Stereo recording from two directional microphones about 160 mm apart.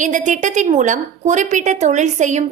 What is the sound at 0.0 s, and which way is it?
A woman's voice, 50° right (ahead or behind).